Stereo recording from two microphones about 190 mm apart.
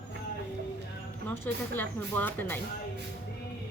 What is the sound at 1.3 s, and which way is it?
Speech, 10° left (ahead or behind).